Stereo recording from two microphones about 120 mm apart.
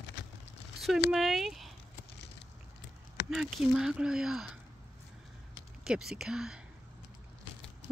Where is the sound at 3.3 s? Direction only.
5° right (ahead or behind).